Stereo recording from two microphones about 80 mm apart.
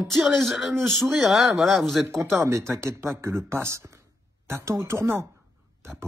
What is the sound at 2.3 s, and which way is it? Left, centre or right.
Speech, right.